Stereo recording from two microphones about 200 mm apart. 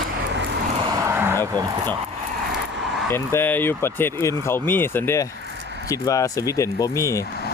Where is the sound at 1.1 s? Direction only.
10° right (ahead or behind).